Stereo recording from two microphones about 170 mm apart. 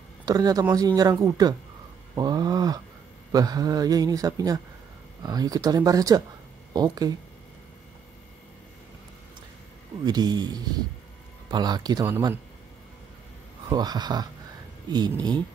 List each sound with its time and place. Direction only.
0.2 s speech: 20° right (ahead or behind)
10.0 s speech: 25° right (ahead or behind)
13.7 s speech: 25° right (ahead or behind)